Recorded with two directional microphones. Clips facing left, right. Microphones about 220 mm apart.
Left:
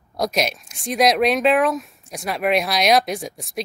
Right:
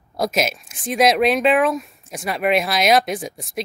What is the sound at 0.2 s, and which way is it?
Speech, centre (ahead or behind).